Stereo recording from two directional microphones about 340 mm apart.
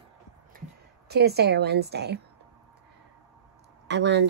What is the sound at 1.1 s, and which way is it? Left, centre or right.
A woman's voice, right.